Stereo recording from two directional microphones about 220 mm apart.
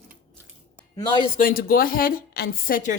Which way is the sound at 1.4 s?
40° left (ahead or behind).